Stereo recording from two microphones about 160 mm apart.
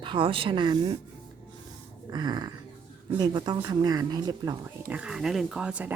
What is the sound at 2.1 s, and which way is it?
Speech, 25° right (ahead or behind).